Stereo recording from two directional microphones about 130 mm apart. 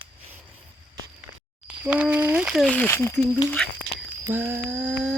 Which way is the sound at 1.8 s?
15° right (ahead or behind).